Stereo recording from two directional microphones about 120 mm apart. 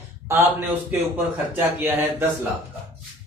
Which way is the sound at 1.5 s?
20° right (ahead or behind).